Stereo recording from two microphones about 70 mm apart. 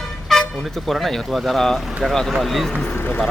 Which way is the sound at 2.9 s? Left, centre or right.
Left.